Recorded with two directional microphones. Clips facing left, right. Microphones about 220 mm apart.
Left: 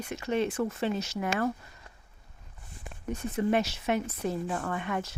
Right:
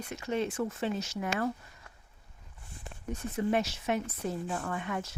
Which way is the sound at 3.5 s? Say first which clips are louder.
Left 2 dB; 70° left (ahead or behind).